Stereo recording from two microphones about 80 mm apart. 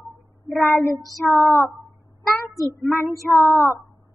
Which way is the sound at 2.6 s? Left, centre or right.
Left.